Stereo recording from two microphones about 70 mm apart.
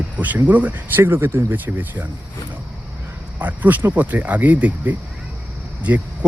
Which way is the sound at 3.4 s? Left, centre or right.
Right.